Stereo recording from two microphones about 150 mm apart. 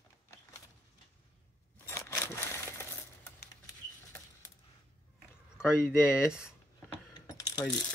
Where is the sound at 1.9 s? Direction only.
15° left (ahead or behind).